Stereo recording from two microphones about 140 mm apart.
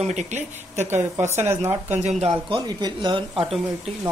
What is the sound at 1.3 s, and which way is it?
Speech, 15° right (ahead or behind).